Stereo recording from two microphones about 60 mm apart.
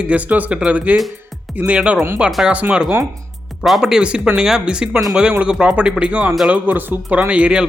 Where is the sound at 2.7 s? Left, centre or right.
Centre.